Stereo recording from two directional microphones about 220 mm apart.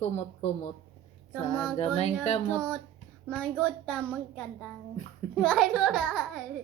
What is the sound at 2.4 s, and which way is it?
A child's voice, 5° left (ahead or behind).